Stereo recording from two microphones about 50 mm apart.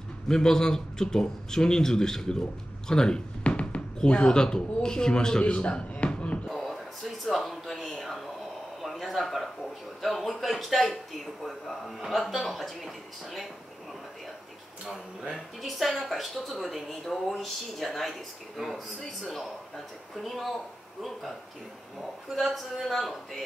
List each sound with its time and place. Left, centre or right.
0.3 s speech: centre
6.4 s a sound: centre
10.0 s a woman's voice: centre
14.9 s speech: centre
15.6 s a woman's voice: centre